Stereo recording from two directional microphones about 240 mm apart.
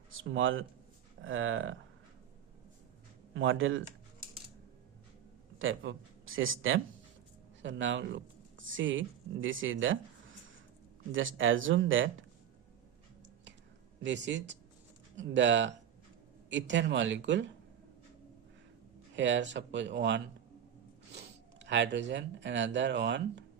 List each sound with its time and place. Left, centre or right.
0.1 s speech: right
3.3 s speech: right
5.5 s speech: right
11.1 s speech: right
14.0 s speech: right
19.1 s speech: right